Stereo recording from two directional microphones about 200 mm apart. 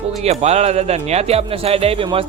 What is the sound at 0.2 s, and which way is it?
Speech, 30° right (ahead or behind).